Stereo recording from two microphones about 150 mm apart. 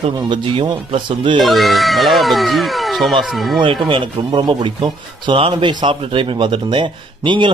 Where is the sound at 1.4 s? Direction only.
Centre (ahead or behind).